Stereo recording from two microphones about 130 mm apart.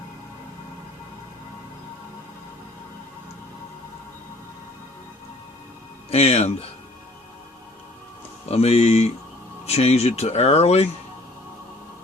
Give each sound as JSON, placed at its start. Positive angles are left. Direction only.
{"t": 6.1, "sound": "speech", "side_deg": 50}
{"t": 8.4, "sound": "speech", "side_deg": 55}